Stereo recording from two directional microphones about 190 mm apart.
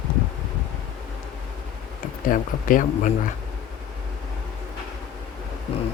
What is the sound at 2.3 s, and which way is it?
Speech, 45° left (ahead or behind).